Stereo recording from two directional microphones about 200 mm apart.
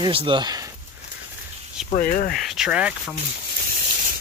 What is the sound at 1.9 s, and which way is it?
Speech, 40° left (ahead or behind).